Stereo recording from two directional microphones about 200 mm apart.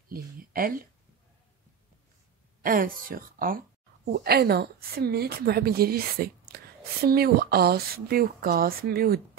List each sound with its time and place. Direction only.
0.1 s a woman's voice: 45° right (ahead or behind)
2.6 s a woman's voice: 45° right (ahead or behind)